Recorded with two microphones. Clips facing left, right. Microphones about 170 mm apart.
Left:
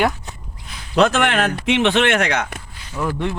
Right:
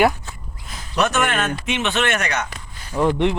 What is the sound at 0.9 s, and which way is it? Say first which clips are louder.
Speech: left 5 dB; 90° left.